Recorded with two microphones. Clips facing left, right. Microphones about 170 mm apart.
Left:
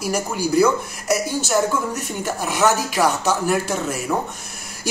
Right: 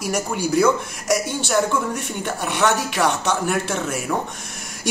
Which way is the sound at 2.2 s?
5° left (ahead or behind).